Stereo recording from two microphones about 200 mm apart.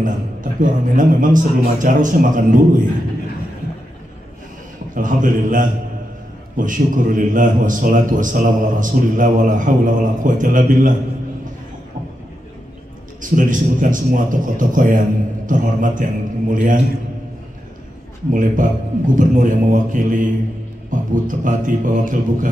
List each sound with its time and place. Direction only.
0.0 s a man's voice: 40° right (ahead or behind)
4.9 s a man's voice: 40° right (ahead or behind)
13.2 s a man's voice: 40° right (ahead or behind)
18.3 s a man's voice: 40° right (ahead or behind)